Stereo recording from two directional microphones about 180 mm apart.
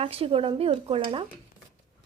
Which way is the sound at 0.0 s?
30° right (ahead or behind).